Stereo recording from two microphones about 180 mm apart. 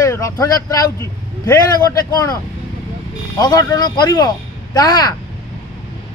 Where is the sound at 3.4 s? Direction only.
20° left (ahead or behind).